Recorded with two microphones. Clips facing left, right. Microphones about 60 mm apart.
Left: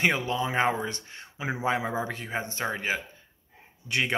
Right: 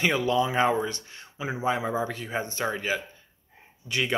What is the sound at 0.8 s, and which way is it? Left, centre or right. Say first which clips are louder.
Speech: right 1 dB; left.